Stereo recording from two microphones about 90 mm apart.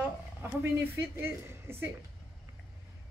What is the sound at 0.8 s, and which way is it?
A woman's voice, 25° right (ahead or behind).